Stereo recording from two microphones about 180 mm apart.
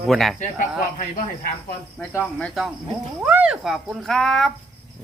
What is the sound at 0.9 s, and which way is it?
Speech, 50° left (ahead or behind).